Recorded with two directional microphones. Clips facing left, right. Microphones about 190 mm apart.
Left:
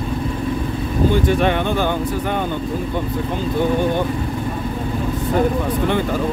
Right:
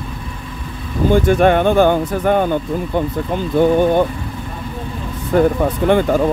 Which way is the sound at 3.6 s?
50° right (ahead or behind).